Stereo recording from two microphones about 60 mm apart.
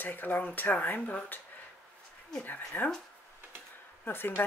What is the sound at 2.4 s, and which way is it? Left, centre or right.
Speech, left.